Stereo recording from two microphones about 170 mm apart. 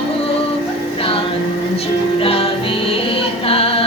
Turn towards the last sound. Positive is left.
turn(degrees=35)  # may be behind; listen again after turning